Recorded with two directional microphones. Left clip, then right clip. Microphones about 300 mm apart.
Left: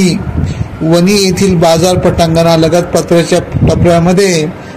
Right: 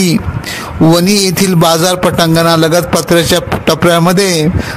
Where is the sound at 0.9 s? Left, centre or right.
Right.